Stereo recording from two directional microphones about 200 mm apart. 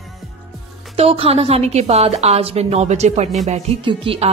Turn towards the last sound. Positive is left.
turn(degrees=-25)  # may be behind; listen again after turning